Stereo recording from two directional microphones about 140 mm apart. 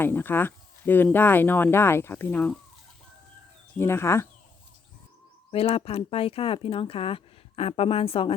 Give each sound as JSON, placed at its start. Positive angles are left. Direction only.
{"t": 0.0, "sound": "speech", "side_deg": 15}
{"t": 3.8, "sound": "speech", "side_deg": 20}
{"t": 5.5, "sound": "speech", "side_deg": 45}